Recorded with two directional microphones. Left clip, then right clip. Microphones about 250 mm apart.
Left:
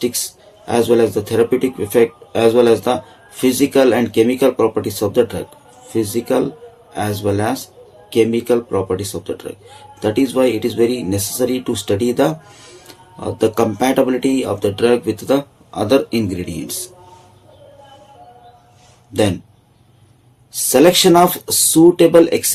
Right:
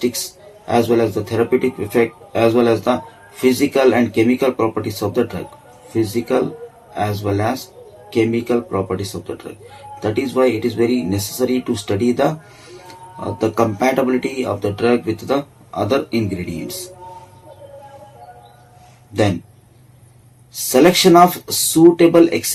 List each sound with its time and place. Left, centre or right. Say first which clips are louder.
0.6 s speech: left 2 dB; left
20.7 s speech: left 1 dB; left